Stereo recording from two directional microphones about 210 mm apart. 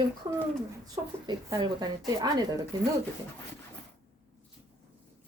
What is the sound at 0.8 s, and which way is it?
Speech, 15° right (ahead or behind).